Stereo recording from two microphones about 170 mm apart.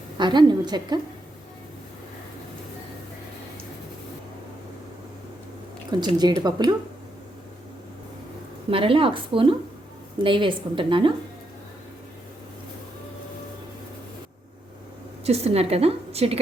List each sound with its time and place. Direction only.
0.2 s speech: 25° right (ahead or behind)
5.9 s speech: 25° right (ahead or behind)
8.7 s a woman's voice: 30° right (ahead or behind)
15.2 s a woman's voice: 40° right (ahead or behind)